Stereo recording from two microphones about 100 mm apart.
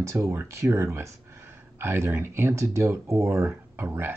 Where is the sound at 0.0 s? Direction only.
30° right (ahead or behind).